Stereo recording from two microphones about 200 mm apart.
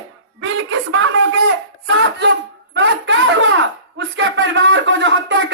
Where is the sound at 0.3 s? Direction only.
70° right (ahead or behind).